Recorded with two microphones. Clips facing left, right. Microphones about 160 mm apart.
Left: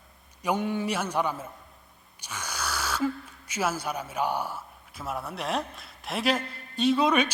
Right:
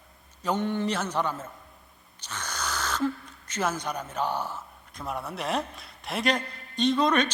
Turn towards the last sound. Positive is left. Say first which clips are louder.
# even
turn(degrees=10)  # may be behind; listen again after turning